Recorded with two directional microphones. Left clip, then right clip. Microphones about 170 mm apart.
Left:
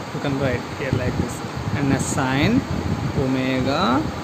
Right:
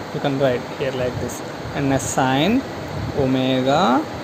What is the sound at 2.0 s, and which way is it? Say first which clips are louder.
Speech: right 5 dB; 10° right (ahead or behind).